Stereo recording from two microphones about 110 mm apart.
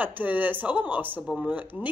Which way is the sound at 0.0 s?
15° right (ahead or behind).